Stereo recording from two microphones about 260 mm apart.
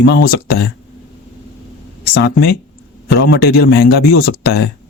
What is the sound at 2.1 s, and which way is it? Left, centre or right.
Speech, left.